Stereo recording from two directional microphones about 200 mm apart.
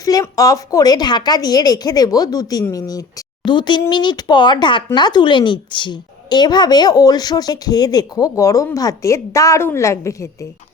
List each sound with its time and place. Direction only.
0.0 s a woman's voice: 15° left (ahead or behind)